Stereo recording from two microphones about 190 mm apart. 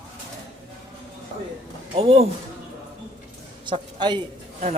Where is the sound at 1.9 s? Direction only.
30° right (ahead or behind).